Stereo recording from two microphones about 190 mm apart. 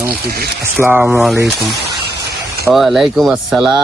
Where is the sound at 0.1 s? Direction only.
55° right (ahead or behind).